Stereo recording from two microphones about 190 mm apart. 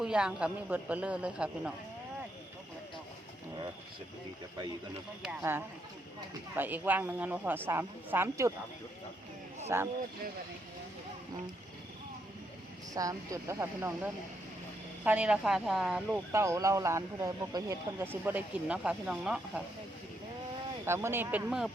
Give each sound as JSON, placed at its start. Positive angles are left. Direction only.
{"t": 0.0, "sound": "a man's voice", "side_deg": -5}
{"t": 5.4, "sound": "speech", "side_deg": -10}
{"t": 9.6, "sound": "speech", "side_deg": -15}
{"t": 12.9, "sound": "a man's voice", "side_deg": -20}
{"t": 16.3, "sound": "speech", "side_deg": -15}
{"t": 20.8, "sound": "speech", "side_deg": -15}